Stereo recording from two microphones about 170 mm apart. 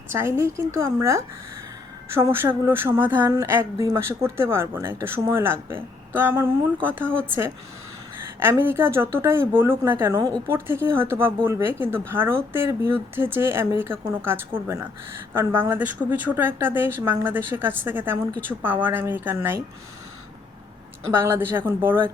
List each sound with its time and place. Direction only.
0.1 s speech: 15° right (ahead or behind)
21.1 s speech: 15° right (ahead or behind)